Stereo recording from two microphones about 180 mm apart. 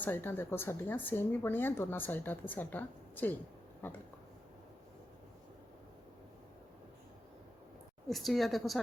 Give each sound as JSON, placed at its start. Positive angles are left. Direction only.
{"t": 0.0, "sound": "speech", "side_deg": 10}
{"t": 8.1, "sound": "speech", "side_deg": 0}